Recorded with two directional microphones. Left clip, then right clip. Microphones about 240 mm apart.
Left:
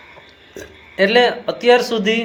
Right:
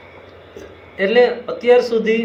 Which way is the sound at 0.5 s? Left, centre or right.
Left.